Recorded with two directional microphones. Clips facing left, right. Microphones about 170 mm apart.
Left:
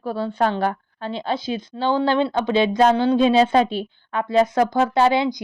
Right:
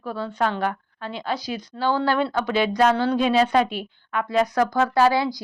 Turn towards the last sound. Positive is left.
turn(degrees=20)  # may be behind; listen again after turning